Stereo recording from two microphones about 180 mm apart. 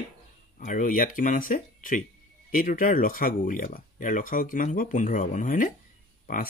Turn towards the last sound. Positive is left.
turn(degrees=50)  # may be behind; listen again after turning